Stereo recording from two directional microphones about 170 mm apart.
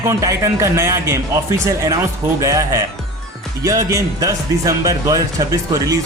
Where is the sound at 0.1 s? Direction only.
20° right (ahead or behind).